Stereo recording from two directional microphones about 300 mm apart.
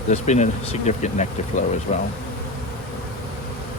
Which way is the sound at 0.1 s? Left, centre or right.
Left.